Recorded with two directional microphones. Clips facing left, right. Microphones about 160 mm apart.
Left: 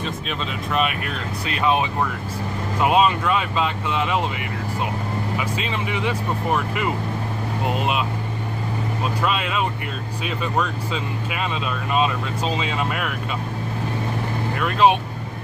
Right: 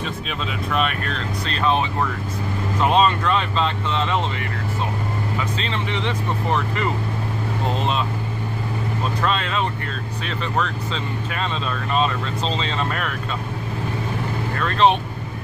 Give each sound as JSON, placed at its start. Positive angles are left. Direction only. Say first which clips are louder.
{"t": 0.7, "sound": "speech", "louder": "even", "side_deg": 5}
{"t": 5.4, "sound": "speech", "louder": "even", "side_deg": 10}
{"t": 9.2, "sound": "speech", "louder": "even", "side_deg": 10}
{"t": 14.6, "sound": "speech", "louder": "even", "side_deg": 10}